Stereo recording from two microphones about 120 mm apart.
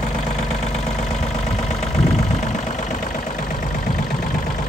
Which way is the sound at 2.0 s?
70° left (ahead or behind).